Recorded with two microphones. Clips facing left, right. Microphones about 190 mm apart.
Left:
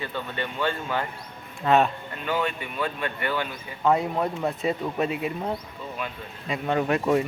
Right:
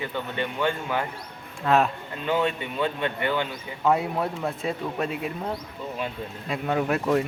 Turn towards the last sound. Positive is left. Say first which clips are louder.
# left 1 dB
turn(degrees=0)  # may be behind; listen again after turning